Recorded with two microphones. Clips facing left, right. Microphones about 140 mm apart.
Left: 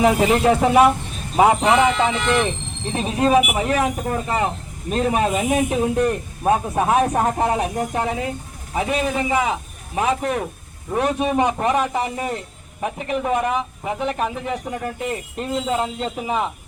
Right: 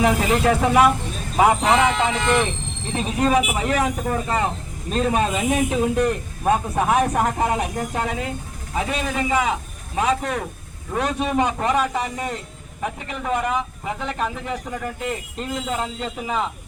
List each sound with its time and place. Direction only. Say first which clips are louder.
0.0 s speech: left 3 dB; 20° left (ahead or behind)
2.9 s speech: left 2 dB; 20° left (ahead or behind)